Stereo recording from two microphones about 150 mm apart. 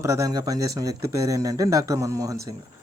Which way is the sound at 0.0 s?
20° right (ahead or behind).